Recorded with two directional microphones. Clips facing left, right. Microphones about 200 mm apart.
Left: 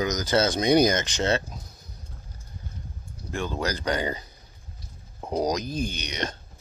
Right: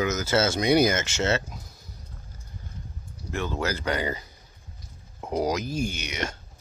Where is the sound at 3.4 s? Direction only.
15° left (ahead or behind).